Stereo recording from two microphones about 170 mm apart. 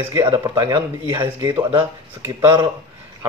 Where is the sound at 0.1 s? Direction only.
20° right (ahead or behind).